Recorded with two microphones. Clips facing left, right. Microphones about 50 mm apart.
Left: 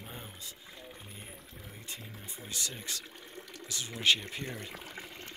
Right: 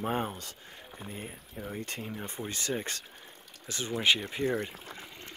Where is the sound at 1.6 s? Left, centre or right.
Right.